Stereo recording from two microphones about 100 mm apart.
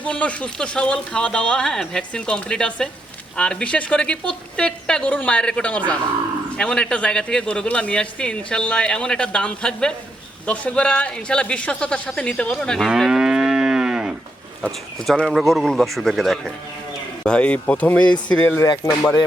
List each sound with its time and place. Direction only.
0.0 s speech: 10° left (ahead or behind)
12.9 s moo: 5° right (ahead or behind)
14.9 s speech: 5° left (ahead or behind)